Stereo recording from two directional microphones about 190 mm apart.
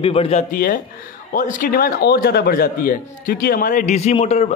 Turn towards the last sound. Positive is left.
turn(degrees=35)  # may be behind; listen again after turning